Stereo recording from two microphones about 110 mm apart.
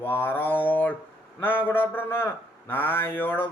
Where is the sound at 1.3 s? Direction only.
20° left (ahead or behind).